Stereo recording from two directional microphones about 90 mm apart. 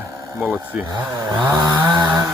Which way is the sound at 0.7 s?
15° right (ahead or behind).